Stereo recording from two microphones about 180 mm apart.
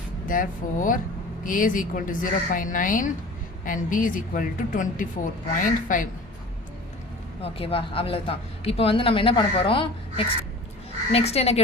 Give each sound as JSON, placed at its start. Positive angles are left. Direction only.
{"t": 0.3, "sound": "a woman's voice", "side_deg": 50}
{"t": 7.4, "sound": "speech", "side_deg": 30}